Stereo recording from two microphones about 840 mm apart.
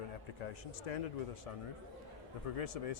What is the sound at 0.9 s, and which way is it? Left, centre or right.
Speech, left.